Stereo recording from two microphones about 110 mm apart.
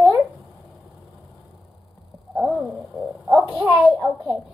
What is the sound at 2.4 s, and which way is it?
Speech, 5° right (ahead or behind).